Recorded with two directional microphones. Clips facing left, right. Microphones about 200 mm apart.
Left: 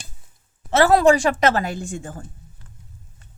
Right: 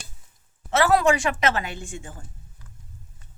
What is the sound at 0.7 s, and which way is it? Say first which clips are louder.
A woman's voice: left 5 dB; 30° left (ahead or behind).